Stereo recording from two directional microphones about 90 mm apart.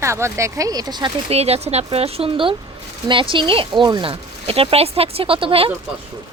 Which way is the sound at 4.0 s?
80° right.